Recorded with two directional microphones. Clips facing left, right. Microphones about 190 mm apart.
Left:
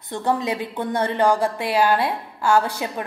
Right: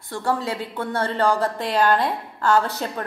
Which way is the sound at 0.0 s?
20° left (ahead or behind).